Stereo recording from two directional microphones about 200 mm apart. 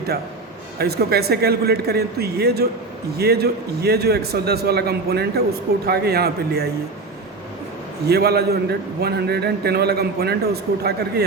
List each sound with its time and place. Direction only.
0.8 s a man's voice: 50° right (ahead or behind)
8.0 s a man's voice: 55° right (ahead or behind)